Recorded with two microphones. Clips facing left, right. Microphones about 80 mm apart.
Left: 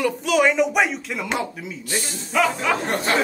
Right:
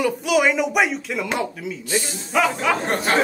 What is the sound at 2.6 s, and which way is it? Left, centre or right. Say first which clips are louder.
Speech: right 1 dB; right.